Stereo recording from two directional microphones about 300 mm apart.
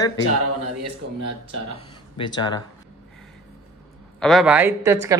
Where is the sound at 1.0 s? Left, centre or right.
Right.